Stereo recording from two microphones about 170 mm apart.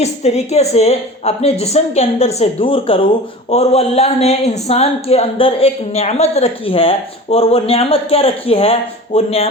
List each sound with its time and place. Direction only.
0.0 s speech: 40° left (ahead or behind)